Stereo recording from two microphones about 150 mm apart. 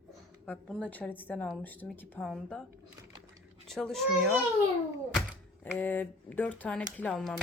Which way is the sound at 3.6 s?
5° left (ahead or behind).